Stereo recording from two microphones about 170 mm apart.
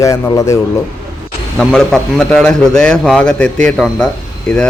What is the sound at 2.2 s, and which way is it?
A man's voice, 5° left (ahead or behind).